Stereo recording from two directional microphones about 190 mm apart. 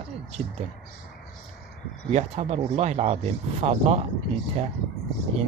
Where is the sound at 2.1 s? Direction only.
35° right (ahead or behind).